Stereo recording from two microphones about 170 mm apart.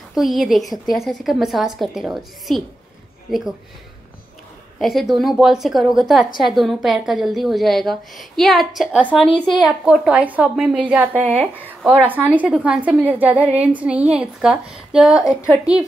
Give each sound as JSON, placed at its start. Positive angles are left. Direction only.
{"t": 0.1, "sound": "a woman's voice", "side_deg": 0}
{"t": 4.7, "sound": "a woman's voice", "side_deg": 0}